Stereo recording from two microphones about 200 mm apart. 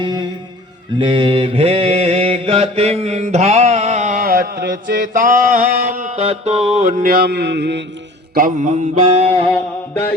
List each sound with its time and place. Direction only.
0.0 s music: 20° right (ahead or behind)
0.9 s mantra: 25° right (ahead or behind); by 7.8 s 60° right (ahead or behind)
8.4 s mantra: 40° right (ahead or behind)
9.5 s mantra: 10° left (ahead or behind)